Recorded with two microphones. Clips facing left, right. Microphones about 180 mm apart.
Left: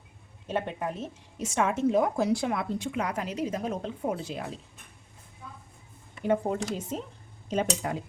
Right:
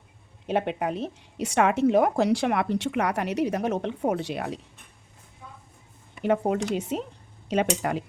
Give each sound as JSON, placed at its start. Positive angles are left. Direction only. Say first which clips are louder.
{"t": 0.4, "sound": "a woman's voice", "louder": "right 5 dB", "side_deg": -70}
{"t": 6.2, "sound": "a woman's voice", "louder": "right 3 dB", "side_deg": -70}
{"t": 7.4, "sound": "a sound", "louder": "right 4 dB", "side_deg": -75}
{"t": 7.8, "sound": "a woman's voice", "louder": "right 4 dB", "side_deg": -70}